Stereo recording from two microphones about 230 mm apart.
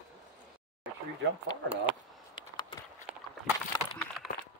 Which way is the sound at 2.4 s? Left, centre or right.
Centre.